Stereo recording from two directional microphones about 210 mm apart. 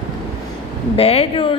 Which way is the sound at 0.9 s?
30° left (ahead or behind).